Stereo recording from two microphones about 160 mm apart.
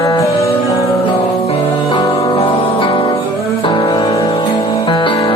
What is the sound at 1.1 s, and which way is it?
Music, 35° left (ahead or behind).